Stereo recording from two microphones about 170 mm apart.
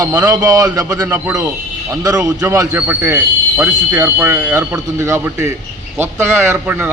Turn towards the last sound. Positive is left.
turn(degrees=-10)  # may be behind; listen again after turning